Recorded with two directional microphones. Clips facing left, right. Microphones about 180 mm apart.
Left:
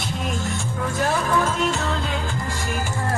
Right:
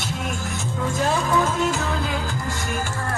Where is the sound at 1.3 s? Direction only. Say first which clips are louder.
Right 1 dB; 10° right (ahead or behind).